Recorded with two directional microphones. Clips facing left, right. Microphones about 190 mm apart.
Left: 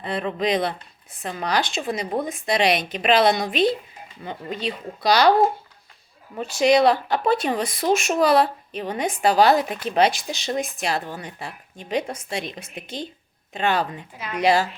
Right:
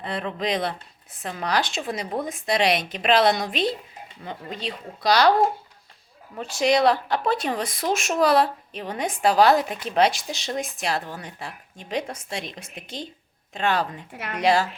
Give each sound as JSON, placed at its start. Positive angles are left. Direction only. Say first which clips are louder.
{"t": 0.0, "sound": "speech", "louder": "left 3 dB", "side_deg": 0}
{"t": 6.3, "sound": "speech", "louder": "left 3 dB", "side_deg": 0}
{"t": 14.1, "sound": "a woman's voice", "louder": "even", "side_deg": -70}
{"t": 14.3, "sound": "speech", "louder": "left 1 dB", "side_deg": 0}